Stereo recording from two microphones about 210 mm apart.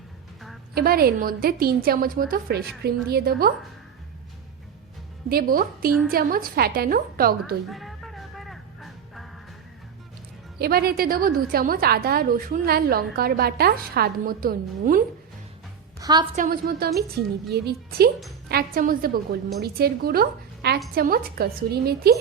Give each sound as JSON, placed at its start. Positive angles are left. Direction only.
{"t": 0.7, "sound": "a woman's voice", "side_deg": -45}
{"t": 5.3, "sound": "a woman's voice", "side_deg": -45}
{"t": 7.7, "sound": "music", "side_deg": 0}
{"t": 10.6, "sound": "a woman's voice", "side_deg": -45}
{"t": 16.0, "sound": "music", "side_deg": -20}
{"t": 16.3, "sound": "a woman's voice", "side_deg": -40}